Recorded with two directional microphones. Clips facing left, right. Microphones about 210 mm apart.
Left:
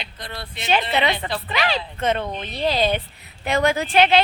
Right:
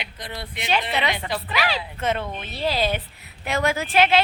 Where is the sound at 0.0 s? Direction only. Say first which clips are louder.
Even; 15° right (ahead or behind).